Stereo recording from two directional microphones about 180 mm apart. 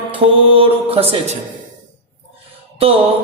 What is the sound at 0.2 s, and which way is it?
Speech, 30° right (ahead or behind).